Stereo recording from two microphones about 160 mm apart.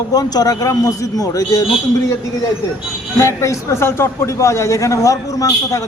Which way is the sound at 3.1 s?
20° left (ahead or behind).